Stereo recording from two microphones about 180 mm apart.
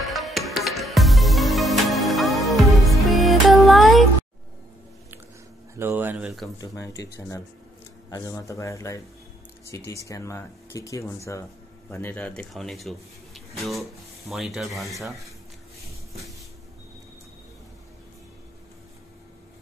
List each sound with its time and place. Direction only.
0.1 s music: centre (ahead or behind)
5.8 s speech: 10° right (ahead or behind)
6.6 s speech: 20° left (ahead or behind); by 15.1 s centre (ahead or behind)